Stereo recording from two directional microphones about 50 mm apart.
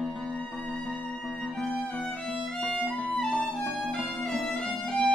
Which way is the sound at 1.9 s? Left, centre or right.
Left.